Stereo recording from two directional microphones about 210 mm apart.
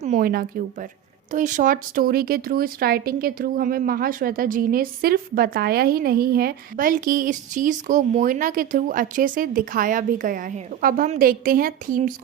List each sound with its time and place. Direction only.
0.0 s speech: 40° right (ahead or behind)